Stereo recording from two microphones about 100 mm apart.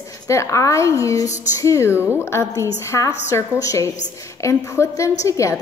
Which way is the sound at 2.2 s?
30° left (ahead or behind).